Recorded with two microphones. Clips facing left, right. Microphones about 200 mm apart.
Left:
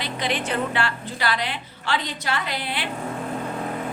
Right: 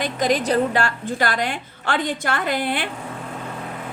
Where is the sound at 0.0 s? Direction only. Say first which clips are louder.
Right 6 dB; 45° right (ahead or behind).